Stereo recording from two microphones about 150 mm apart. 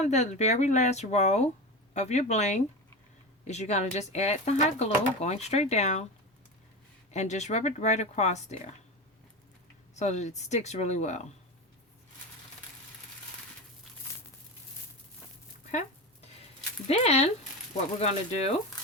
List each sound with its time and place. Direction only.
0.0 s speech: 50° left (ahead or behind)
7.1 s speech: 50° left (ahead or behind)
9.9 s speech: 50° left (ahead or behind)
16.2 s a sound: 45° left (ahead or behind)
17.0 s speech: 45° left (ahead or behind)